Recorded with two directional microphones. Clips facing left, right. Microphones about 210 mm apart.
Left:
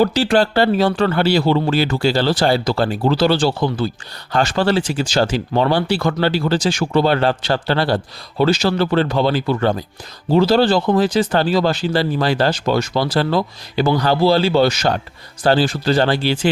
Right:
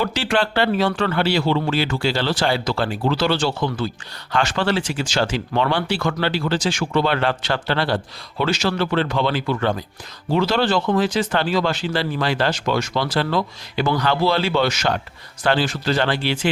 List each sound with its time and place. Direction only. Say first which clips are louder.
0.0 s speech: left 6 dB; 40° left (ahead or behind)